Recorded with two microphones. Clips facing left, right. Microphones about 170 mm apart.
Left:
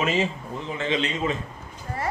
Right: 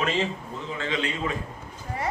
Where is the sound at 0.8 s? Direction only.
20° left (ahead or behind).